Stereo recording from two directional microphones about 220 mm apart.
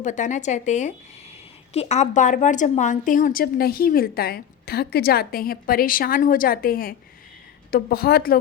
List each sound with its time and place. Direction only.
0.0 s a woman's voice: 35° left (ahead or behind)